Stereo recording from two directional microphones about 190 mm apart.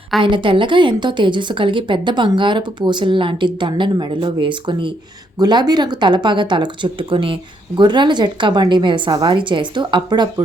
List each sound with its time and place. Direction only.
0.2 s a woman's voice: 25° right (ahead or behind)